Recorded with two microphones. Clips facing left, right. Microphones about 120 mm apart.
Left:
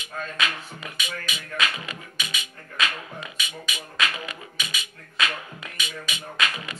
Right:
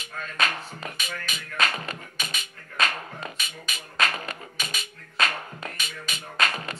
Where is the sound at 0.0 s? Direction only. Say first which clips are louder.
Even; 40° right (ahead or behind).